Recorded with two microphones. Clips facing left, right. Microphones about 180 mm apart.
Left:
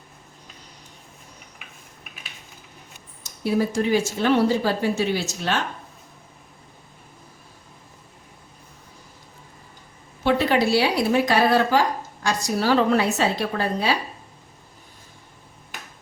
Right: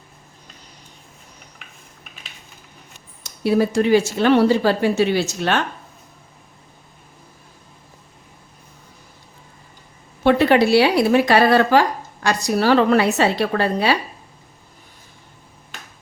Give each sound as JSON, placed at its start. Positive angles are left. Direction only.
{"t": 3.2, "sound": "speech", "side_deg": -75}
{"t": 10.2, "sound": "speech", "side_deg": -65}